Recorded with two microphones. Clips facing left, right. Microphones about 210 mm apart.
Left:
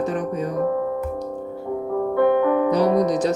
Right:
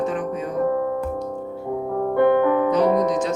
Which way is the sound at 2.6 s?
35° left (ahead or behind).